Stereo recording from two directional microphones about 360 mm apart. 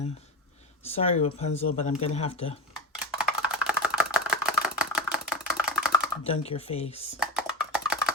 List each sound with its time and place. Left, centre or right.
0.9 s speech: centre
2.7 s computer keyboard: centre
4.4 s a sound: centre
6.2 s speech: centre
7.2 s computer keyboard: centre